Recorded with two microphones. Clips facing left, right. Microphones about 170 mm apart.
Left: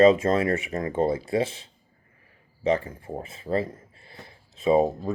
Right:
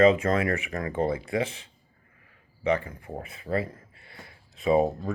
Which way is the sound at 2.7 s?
30° left (ahead or behind).